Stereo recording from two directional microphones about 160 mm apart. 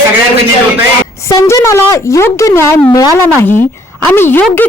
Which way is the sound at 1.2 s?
20° left (ahead or behind).